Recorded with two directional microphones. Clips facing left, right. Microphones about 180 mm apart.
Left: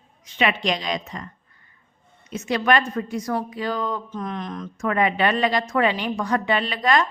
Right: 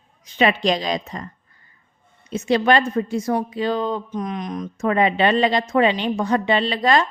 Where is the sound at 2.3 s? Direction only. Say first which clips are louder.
Right 4 dB; 30° right (ahead or behind).